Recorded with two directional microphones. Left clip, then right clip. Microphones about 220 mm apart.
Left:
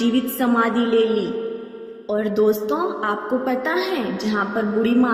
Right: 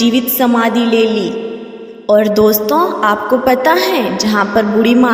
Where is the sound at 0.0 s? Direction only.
40° right (ahead or behind).